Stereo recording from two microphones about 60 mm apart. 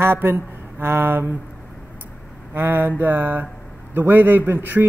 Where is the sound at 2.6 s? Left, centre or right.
Right.